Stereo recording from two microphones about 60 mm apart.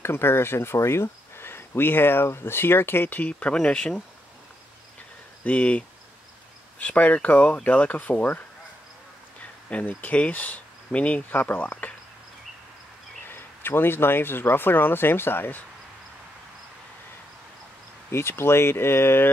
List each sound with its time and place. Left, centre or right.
0.0 s speech: left; by 4.0 s centre
5.4 s speech: left
9.7 s speech: left
13.3 s speech: left
18.1 s speech: left